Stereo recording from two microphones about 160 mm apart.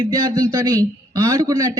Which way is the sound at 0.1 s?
20° right (ahead or behind).